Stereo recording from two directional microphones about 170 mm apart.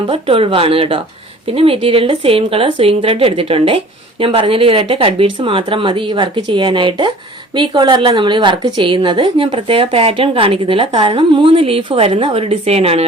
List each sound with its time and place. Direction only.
0.1 s a woman's voice: 35° right (ahead or behind)